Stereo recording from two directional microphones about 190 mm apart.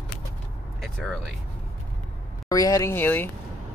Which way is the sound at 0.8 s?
Centre (ahead or behind).